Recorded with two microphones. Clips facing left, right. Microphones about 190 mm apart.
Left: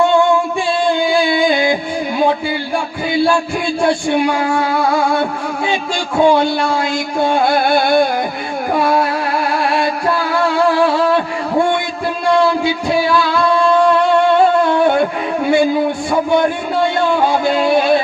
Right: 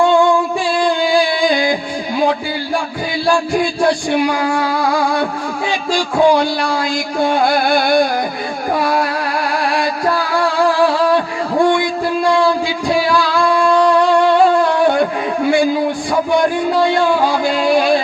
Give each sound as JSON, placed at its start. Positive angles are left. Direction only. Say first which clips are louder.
{"t": 1.3, "sound": "music", "louder": "left 1 dB", "side_deg": 25}
{"t": 4.3, "sound": "music", "louder": "left 1 dB", "side_deg": 25}
{"t": 6.2, "sound": "music", "louder": "left 2 dB", "side_deg": 25}
{"t": 15.4, "sound": "music", "louder": "left 1 dB", "side_deg": 20}
{"t": 17.4, "sound": "a sound", "louder": "even", "side_deg": 20}